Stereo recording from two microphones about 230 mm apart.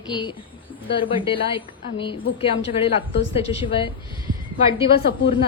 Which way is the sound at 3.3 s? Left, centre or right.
Left.